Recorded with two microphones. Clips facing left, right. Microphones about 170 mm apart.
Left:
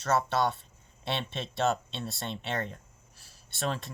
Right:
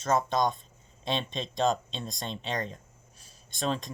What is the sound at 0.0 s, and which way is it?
Speech, 15° right (ahead or behind).